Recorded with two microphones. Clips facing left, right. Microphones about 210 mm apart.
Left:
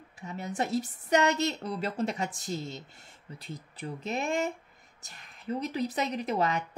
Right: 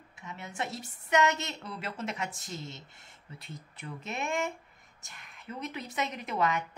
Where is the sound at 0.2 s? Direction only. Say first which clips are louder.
Left 5 dB; 35° left (ahead or behind).